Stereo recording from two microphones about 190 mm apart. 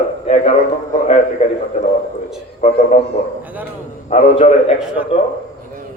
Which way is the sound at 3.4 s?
10° right (ahead or behind).